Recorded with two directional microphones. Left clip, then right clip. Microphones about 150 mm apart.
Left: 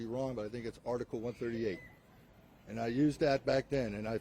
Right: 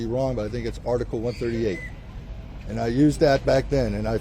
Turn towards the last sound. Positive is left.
turn(degrees=55)  # may be behind; listen again after turning